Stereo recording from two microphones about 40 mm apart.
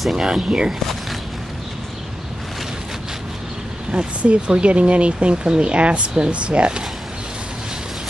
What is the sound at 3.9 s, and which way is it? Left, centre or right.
Speech, right.